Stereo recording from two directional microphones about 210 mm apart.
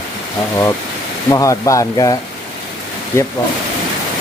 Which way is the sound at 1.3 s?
15° left (ahead or behind).